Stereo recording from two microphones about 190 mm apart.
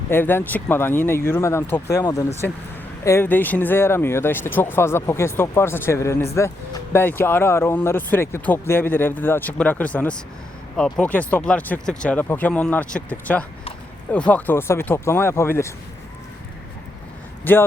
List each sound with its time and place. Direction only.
0.1 s speech: 10° left (ahead or behind)
17.5 s speech: 10° left (ahead or behind)